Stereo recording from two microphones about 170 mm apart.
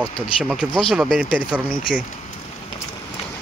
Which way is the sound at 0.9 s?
5° right (ahead or behind).